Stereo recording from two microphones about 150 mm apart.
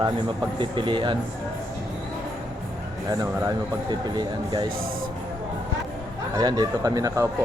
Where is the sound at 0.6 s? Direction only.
30° right (ahead or behind).